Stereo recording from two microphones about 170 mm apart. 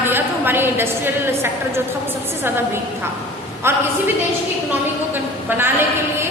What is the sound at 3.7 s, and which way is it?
Speech, 15° right (ahead or behind).